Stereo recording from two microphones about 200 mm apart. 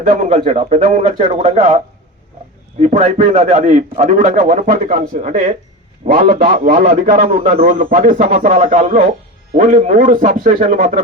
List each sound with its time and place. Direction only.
0.0 s a man's voice: 35° right (ahead or behind)
2.8 s a man's voice: 35° right (ahead or behind)
7.5 s a man's voice: 45° right (ahead or behind)